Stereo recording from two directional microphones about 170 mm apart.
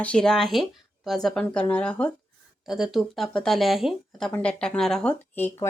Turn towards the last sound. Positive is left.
turn(degrees=10)  # may be behind; listen again after turning